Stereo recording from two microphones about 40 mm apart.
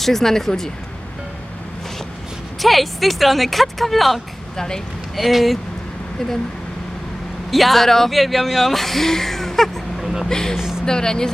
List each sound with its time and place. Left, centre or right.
0.0 s speech: centre
2.6 s speech: centre
4.5 s speech: centre
5.1 s speech: centre
7.5 s speech: centre
10.0 s vehicle: centre
10.2 s speech: centre